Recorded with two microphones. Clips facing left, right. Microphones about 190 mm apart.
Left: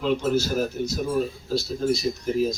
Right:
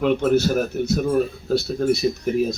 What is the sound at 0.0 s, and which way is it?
A man's voice, 60° right (ahead or behind).